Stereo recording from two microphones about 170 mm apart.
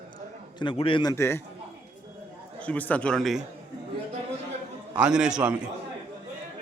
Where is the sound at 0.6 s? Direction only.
30° left (ahead or behind).